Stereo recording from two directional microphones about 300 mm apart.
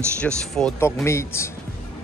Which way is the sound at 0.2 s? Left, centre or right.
Centre.